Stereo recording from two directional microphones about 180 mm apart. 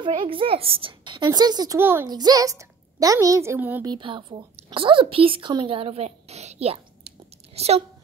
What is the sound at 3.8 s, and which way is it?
A woman's voice, 25° right (ahead or behind).